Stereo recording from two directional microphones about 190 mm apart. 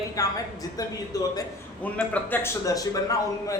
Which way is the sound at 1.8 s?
10° left (ahead or behind).